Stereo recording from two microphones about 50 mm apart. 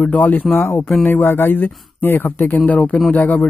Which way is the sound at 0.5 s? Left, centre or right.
Left.